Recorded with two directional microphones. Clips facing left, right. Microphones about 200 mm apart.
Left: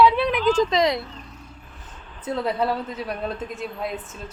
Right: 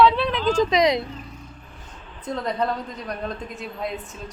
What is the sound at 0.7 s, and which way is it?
Speech, 20° right (ahead or behind).